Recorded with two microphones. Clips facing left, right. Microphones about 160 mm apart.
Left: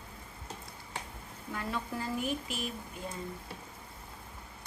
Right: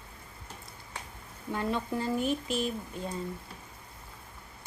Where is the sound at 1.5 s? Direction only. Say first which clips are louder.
Right 5 dB; 25° right (ahead or behind).